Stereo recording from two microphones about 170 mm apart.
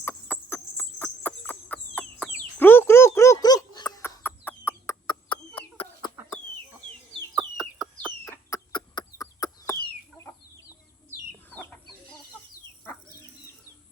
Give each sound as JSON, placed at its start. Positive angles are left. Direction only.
{"t": 0.0, "sound": "chicken", "side_deg": 15}
{"t": 2.4, "sound": "a sound", "side_deg": 10}
{"t": 5.0, "sound": "chicken", "side_deg": 30}
{"t": 7.3, "sound": "chicken", "side_deg": -5}
{"t": 8.3, "sound": "chicken", "side_deg": 20}
{"t": 11.4, "sound": "chicken", "side_deg": 10}